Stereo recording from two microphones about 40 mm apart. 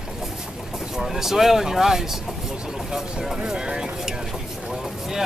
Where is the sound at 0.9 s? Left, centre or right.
Centre.